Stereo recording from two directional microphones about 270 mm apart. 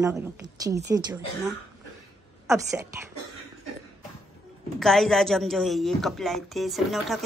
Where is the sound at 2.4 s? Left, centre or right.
Centre.